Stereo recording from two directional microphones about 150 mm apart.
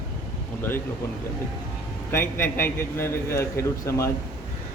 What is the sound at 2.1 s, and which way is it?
A man's voice, 15° left (ahead or behind).